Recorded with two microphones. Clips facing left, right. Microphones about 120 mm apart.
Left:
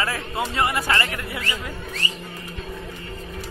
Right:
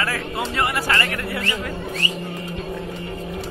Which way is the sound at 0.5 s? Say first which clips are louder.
Even; 20° left (ahead or behind).